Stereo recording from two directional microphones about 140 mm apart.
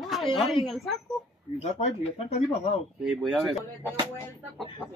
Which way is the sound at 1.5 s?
50° left (ahead or behind).